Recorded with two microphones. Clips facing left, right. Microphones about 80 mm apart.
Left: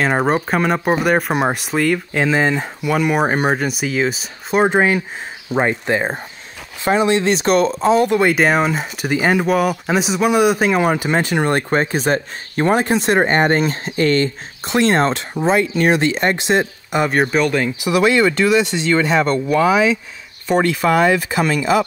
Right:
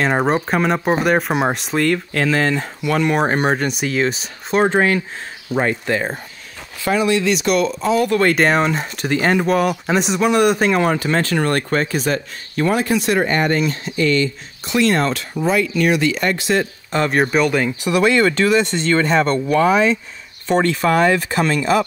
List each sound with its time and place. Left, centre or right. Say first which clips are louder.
0.0 s speech: even; centre
2.1 s speech: left 1 dB; centre; by 8.1 s left
8.1 s speech: left 1 dB; centre
17.1 s speech: right 1 dB; centre